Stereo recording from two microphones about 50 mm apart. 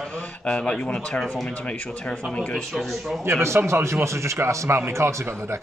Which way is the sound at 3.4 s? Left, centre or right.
Right.